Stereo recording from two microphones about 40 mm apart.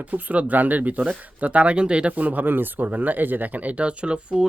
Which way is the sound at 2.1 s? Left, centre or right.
Right.